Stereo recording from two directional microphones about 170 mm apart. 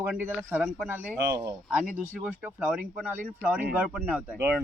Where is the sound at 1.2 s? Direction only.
15° right (ahead or behind).